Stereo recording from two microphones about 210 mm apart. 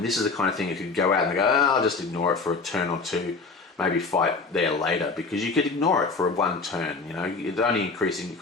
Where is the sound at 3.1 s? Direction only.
5° left (ahead or behind).